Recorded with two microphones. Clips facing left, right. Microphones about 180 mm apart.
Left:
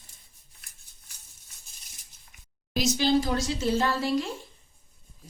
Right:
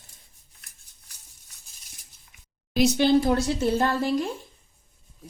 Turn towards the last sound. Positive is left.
turn(degrees=-50)  # may be behind; listen again after turning